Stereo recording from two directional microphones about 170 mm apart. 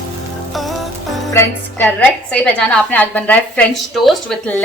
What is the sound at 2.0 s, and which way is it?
A woman's voice, 5° left (ahead or behind).